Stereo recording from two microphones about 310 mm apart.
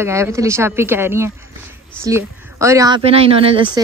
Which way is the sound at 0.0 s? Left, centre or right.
Centre.